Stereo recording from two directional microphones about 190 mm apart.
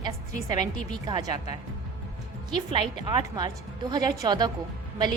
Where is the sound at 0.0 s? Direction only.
20° right (ahead or behind).